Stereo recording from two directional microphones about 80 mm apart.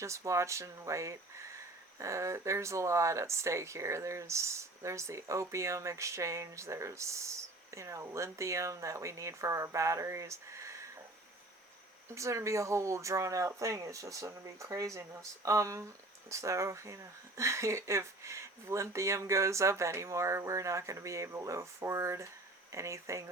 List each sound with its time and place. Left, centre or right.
0.0 s speech: right
12.1 s speech: right